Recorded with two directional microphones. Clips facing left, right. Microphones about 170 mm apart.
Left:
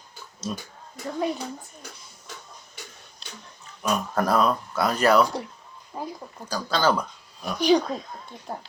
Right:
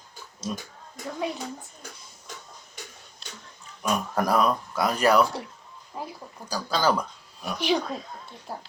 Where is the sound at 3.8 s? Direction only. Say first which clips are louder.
Left 1 dB; 10° right (ahead or behind).